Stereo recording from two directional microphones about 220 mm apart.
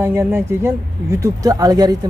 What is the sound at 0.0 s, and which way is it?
Speech, 10° right (ahead or behind).